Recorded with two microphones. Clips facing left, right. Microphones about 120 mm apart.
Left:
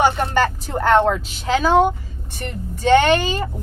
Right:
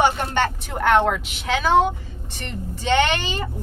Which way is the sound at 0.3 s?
35° left (ahead or behind).